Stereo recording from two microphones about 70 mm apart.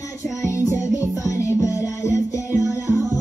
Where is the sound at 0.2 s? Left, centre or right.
Left.